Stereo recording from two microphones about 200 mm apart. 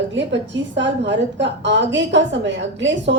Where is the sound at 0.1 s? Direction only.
65° right (ahead or behind).